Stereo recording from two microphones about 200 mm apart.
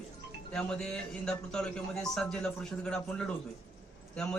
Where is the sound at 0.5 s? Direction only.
5° left (ahead or behind).